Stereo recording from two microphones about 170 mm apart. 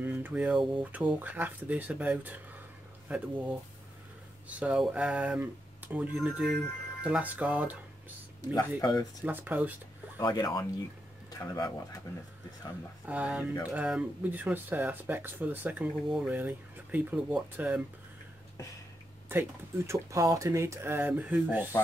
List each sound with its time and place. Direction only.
0.0 s speech: 10° right (ahead or behind)
4.6 s speech: 5° right (ahead or behind)
8.4 s speech: 25° left (ahead or behind)
9.2 s speech: 10° right (ahead or behind)
10.1 s speech: 25° left (ahead or behind)
13.0 s speech: 10° right (ahead or behind)
19.9 s speech: 20° right (ahead or behind)